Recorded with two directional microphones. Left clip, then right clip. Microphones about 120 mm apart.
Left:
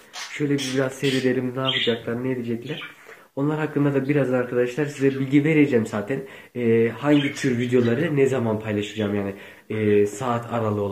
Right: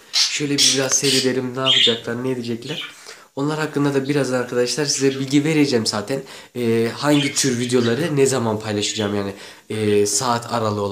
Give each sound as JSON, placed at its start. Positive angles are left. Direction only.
{"t": 0.3, "sound": "speech", "side_deg": -20}
{"t": 3.3, "sound": "speech", "side_deg": -25}